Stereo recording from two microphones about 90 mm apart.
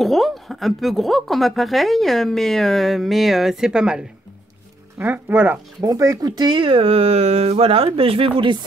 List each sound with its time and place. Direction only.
0.0 s a woman's voice: centre (ahead or behind)
4.9 s speech: 20° right (ahead or behind)
5.9 s speech: 40° right (ahead or behind); by 8.5 s 80° right